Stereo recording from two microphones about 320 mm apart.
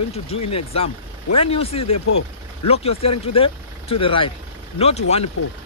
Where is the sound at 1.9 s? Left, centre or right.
Left.